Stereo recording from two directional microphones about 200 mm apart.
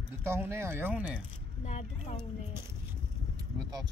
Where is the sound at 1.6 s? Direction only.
35° left (ahead or behind).